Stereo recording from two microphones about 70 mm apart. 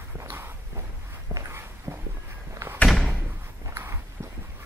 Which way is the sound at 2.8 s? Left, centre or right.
Centre.